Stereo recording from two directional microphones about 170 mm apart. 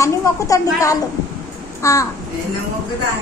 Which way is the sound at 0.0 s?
20° left (ahead or behind).